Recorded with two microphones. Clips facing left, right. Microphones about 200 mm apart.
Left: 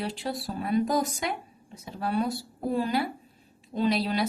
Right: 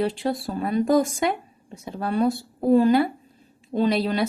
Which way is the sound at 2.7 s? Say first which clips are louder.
Right 10 dB; 50° right (ahead or behind).